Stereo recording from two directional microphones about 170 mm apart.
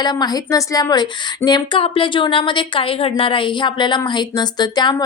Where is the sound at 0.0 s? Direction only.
25° left (ahead or behind).